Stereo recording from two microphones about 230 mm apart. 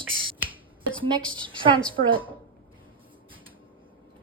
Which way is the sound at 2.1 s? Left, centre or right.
Right.